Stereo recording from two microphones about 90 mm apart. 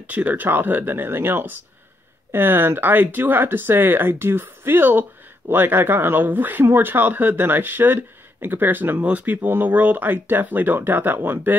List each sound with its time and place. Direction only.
0.0 s speech: 20° right (ahead or behind)